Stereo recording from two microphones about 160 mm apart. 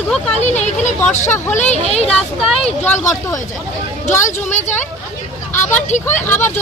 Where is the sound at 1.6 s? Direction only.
45° left (ahead or behind).